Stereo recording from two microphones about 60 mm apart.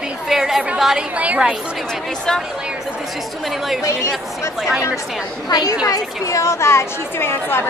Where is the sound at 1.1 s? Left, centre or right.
Right.